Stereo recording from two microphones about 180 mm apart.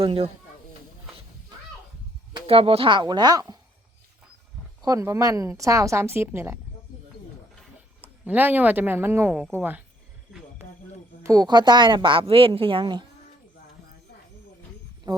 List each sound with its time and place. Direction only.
0.0 s speech: 30° right (ahead or behind)
2.3 s speech: 30° right (ahead or behind)
4.8 s a woman's voice: 20° right (ahead or behind)
8.3 s a woman's voice: 10° right (ahead or behind)
11.2 s a woman's voice: 20° right (ahead or behind)
15.1 s a sound: 20° right (ahead or behind)